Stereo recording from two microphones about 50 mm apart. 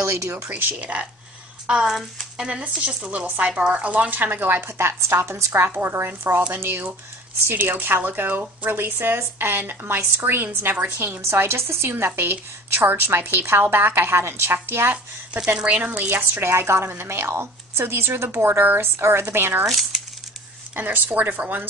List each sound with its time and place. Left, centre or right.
0.0 s speech: right
0.3 s speech: right
1.7 s speech: centre
3.1 s speech: right
4.1 s speech: right
4.6 s speech: right
11.0 s a woman's voice: right
15.3 s speech: right
16.1 s a woman's voice: right
19.6 s speech: centre
20.7 s speech: right